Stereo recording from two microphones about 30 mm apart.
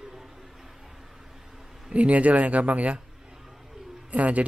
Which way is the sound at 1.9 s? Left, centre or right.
Right.